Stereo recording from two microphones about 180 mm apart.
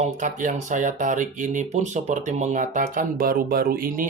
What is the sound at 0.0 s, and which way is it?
Speech, 45° right (ahead or behind).